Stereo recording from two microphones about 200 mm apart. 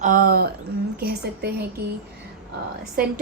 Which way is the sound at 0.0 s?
45° right (ahead or behind).